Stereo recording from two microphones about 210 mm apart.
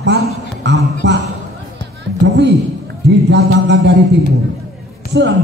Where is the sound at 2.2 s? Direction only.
55° right (ahead or behind).